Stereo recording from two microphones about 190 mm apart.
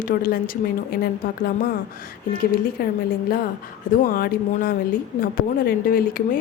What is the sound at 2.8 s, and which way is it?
A woman's voice, 55° left (ahead or behind).